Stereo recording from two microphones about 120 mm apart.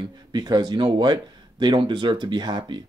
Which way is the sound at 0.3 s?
35° right (ahead or behind).